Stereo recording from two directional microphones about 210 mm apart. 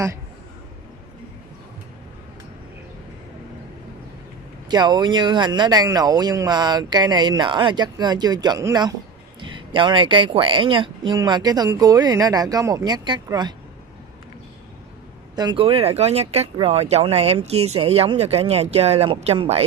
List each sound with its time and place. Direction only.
4.6 s speech: 20° right (ahead or behind)
15.3 s speech: 20° right (ahead or behind)